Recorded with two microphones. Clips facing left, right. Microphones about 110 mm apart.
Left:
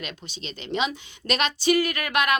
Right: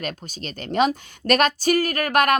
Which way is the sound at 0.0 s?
45° right (ahead or behind).